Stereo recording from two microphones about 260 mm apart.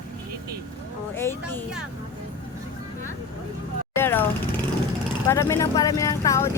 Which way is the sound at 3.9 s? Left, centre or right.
Centre.